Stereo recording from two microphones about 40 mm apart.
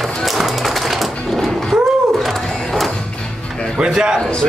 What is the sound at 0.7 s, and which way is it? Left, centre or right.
Sewing machine, centre.